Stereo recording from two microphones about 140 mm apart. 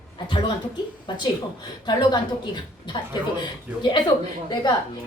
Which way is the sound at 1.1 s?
35° left (ahead or behind).